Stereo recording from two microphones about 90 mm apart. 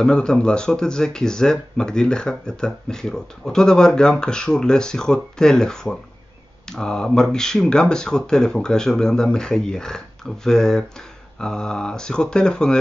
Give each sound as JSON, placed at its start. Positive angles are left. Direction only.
{"t": 0.0, "sound": "speech", "side_deg": 10}